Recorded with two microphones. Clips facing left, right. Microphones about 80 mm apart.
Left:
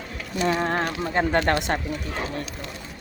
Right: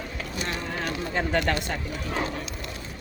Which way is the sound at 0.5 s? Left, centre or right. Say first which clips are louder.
Left 9 dB; left.